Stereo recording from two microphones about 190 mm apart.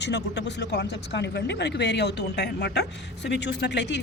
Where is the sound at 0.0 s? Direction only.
65° left (ahead or behind).